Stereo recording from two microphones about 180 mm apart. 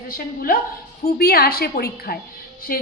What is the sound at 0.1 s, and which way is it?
A woman's voice, 55° left (ahead or behind).